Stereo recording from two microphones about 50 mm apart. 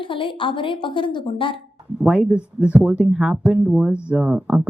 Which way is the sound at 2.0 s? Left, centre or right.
Centre.